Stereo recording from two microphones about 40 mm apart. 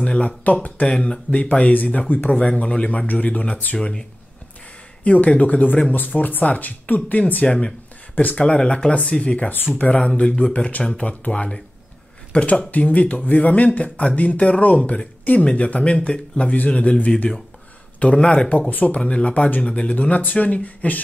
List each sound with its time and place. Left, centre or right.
0.0 s a sound: left
0.4 s speech: left
0.8 s speech: left
1.3 s speech: left
2.3 s speech: left
3.7 s speech: centre
5.0 s speech: left
7.4 s speech: left
18.7 s speech: left
19.0 s speech: left